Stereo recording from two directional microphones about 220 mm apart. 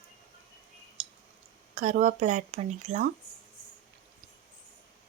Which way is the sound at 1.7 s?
35° right (ahead or behind).